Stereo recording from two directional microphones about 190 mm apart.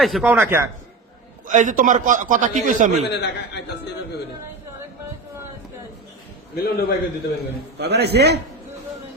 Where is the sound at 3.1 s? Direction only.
65° left (ahead or behind).